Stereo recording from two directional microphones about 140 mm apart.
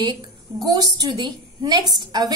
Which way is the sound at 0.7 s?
25° right (ahead or behind).